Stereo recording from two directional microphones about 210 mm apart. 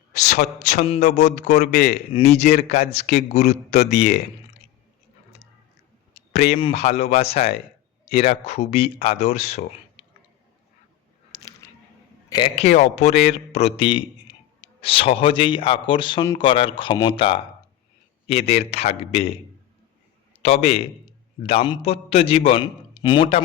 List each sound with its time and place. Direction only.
0.1 s a man's voice: 35° left (ahead or behind)
1.9 s a man's voice: 30° left (ahead or behind)
6.1 s a man's voice: 30° left (ahead or behind)
12.3 s a man's voice: 25° left (ahead or behind)
20.4 s a man's voice: 30° left (ahead or behind)